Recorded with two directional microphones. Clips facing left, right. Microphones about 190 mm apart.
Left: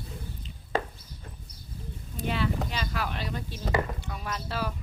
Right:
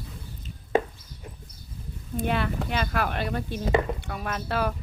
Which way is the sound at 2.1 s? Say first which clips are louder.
Right 3 dB; 55° right (ahead or behind).